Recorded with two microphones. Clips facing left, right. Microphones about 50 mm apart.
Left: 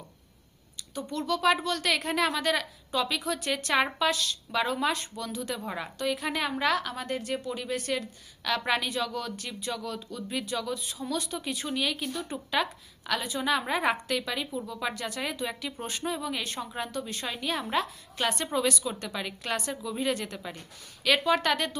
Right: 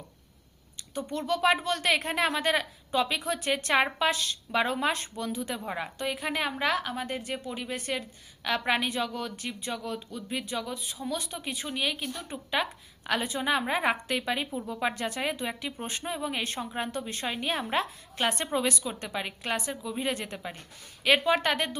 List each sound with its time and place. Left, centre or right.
0.9 s a woman's voice: right
13.1 s a woman's voice: right